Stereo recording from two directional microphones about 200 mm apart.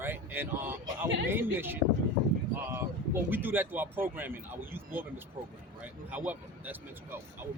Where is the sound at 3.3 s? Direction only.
10° right (ahead or behind).